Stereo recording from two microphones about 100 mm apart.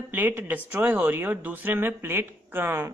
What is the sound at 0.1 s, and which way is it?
Speech, 20° right (ahead or behind).